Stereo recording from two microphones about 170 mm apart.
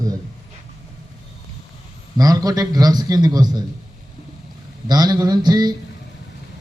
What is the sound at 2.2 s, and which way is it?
Speech, 20° right (ahead or behind).